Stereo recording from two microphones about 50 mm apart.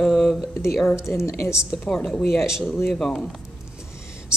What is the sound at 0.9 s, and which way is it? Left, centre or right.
Speech, left.